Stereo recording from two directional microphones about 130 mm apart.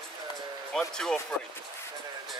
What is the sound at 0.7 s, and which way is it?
Music, 5° left (ahead or behind).